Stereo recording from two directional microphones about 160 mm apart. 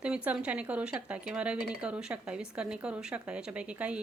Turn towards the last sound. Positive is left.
turn(degrees=-5)  # may be behind; listen again after turning